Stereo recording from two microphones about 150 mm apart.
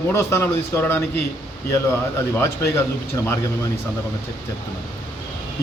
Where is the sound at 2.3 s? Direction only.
15° left (ahead or behind).